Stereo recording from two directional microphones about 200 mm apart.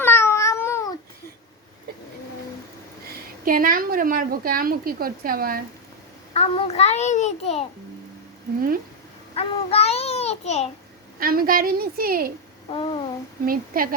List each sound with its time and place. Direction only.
0.0 s a sound: 10° left (ahead or behind)
3.4 s a woman's voice: 45° right (ahead or behind)
6.3 s a child's voice: 30° left (ahead or behind)
9.3 s child singing: 30° left (ahead or behind)
11.2 s a woman's voice: 45° right (ahead or behind)
12.7 s a child's voice: 25° left (ahead or behind)
13.4 s a woman's voice: 45° right (ahead or behind)